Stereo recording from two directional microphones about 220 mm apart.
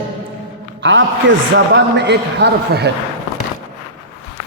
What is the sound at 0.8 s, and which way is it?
A man's voice, 55° right (ahead or behind).